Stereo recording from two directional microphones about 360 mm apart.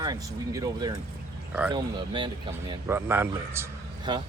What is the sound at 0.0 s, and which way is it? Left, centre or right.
Speech, centre.